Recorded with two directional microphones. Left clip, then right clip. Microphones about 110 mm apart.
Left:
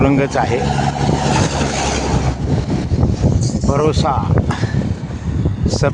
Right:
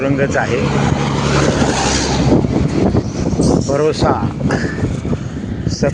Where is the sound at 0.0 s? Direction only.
35° left (ahead or behind).